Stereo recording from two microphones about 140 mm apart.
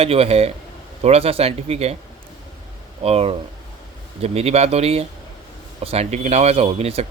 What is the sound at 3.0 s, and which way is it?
Speech, 45° right (ahead or behind).